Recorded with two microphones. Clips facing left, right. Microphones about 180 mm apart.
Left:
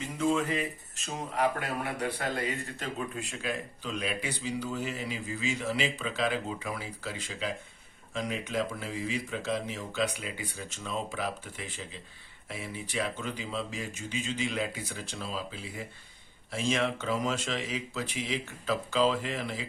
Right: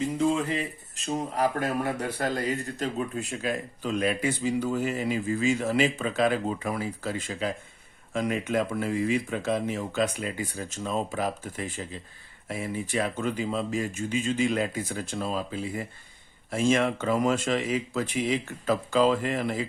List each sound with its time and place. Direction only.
0.2 s speech: 35° right (ahead or behind)
14.9 s speech: 55° right (ahead or behind)